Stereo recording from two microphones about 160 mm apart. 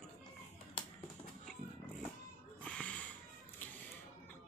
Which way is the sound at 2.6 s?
10° left (ahead or behind).